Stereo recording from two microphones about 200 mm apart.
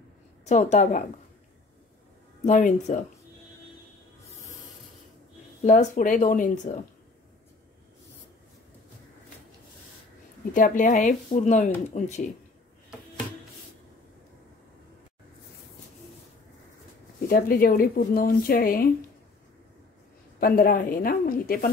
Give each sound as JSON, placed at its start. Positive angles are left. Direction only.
{"t": 0.5, "sound": "speech", "side_deg": 35}
{"t": 2.4, "sound": "speech", "side_deg": 40}
{"t": 5.6, "sound": "speech", "side_deg": 35}
{"t": 10.5, "sound": "speech", "side_deg": 40}
{"t": 17.3, "sound": "speech", "side_deg": 45}
{"t": 20.3, "sound": "speech", "side_deg": 45}